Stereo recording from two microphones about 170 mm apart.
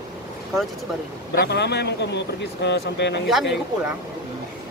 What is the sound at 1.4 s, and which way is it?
Speech, 85° left.